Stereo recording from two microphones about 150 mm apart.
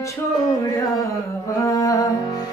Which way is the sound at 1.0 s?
20° left (ahead or behind).